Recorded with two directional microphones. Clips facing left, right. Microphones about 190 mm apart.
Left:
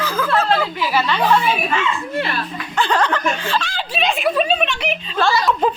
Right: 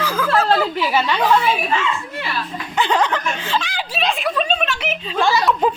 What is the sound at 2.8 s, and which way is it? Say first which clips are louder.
Speech: even; 20° right (ahead or behind).